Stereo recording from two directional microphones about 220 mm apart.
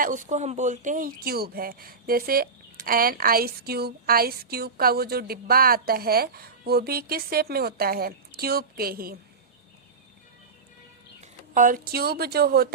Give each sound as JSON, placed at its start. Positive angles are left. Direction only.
{"t": 0.0, "sound": "speech", "side_deg": -35}
{"t": 11.2, "sound": "speech", "side_deg": -35}